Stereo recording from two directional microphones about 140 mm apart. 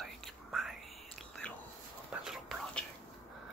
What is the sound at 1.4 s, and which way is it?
Whispering, 10° left (ahead or behind).